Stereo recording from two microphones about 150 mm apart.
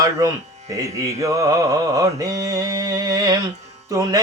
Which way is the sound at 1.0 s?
25° right (ahead or behind).